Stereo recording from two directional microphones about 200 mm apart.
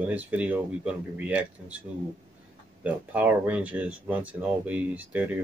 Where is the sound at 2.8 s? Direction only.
10° right (ahead or behind).